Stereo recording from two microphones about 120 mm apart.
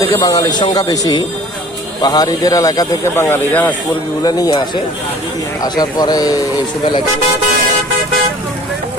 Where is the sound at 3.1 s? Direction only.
20° left (ahead or behind).